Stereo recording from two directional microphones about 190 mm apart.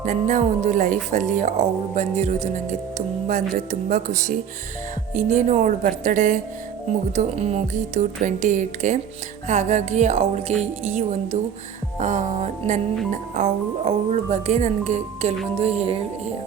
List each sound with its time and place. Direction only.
0.0 s speech: 40° right (ahead or behind)